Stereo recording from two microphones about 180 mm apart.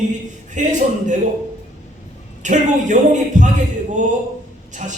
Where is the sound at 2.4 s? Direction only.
45° right (ahead or behind).